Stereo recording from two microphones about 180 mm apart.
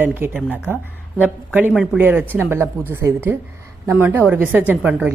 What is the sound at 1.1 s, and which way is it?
Speech, 10° left (ahead or behind).